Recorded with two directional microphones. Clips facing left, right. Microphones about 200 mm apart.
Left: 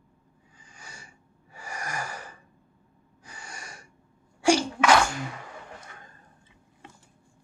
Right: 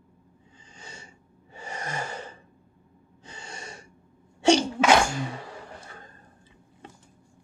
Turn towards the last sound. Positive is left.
turn(degrees=-30)  # may be behind; listen again after turning